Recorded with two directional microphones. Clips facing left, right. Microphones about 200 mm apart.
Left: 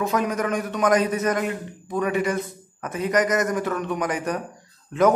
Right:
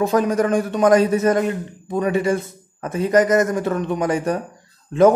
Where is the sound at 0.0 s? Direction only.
30° right (ahead or behind).